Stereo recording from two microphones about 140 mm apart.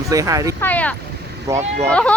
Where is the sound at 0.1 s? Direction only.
25° right (ahead or behind).